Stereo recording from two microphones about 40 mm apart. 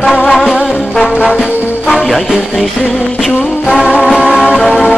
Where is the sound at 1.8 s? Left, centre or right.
Left.